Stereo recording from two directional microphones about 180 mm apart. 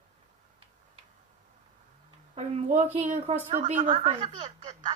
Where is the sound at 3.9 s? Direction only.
30° right (ahead or behind).